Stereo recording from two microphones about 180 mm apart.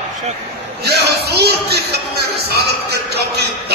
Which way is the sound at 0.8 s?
65° right (ahead or behind).